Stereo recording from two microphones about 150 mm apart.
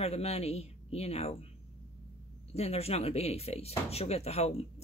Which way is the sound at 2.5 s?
45° left (ahead or behind).